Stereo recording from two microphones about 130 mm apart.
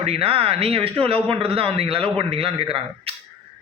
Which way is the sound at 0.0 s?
50° right (ahead or behind).